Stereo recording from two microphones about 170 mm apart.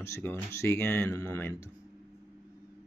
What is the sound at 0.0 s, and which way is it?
Speech, 15° left (ahead or behind).